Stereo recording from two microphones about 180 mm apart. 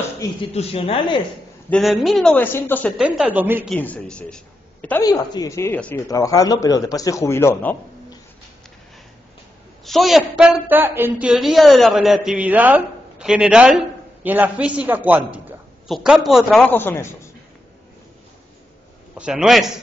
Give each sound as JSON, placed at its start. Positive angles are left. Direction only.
{"t": 0.2, "sound": "speech", "side_deg": 30}
{"t": 1.7, "sound": "speech", "side_deg": 0}
{"t": 3.0, "sound": "a man's voice", "side_deg": -5}
{"t": 3.7, "sound": "speech", "side_deg": 10}
{"t": 5.0, "sound": "a man's voice", "side_deg": 20}
{"t": 9.8, "sound": "a woman's voice", "side_deg": 0}
{"t": 16.6, "sound": "speech", "side_deg": 10}
{"t": 19.1, "sound": "a woman's voice", "side_deg": -5}